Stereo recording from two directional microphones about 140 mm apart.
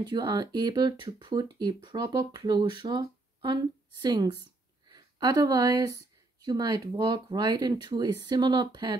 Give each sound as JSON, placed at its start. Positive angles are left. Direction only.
{"t": 0.0, "sound": "speech", "side_deg": -30}